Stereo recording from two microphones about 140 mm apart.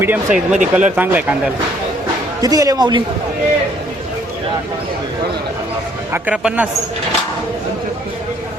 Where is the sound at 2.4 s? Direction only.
25° right (ahead or behind).